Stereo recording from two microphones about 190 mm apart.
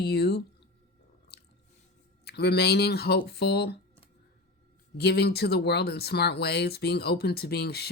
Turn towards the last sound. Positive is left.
turn(degrees=60)  # may be behind; listen again after turning